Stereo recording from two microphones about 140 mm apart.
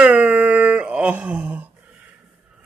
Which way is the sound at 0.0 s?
10° right (ahead or behind).